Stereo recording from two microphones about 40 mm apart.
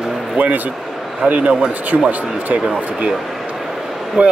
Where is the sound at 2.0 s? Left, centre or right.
Right.